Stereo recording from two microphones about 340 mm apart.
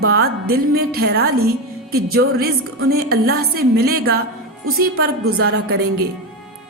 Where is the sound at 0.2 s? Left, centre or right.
Right.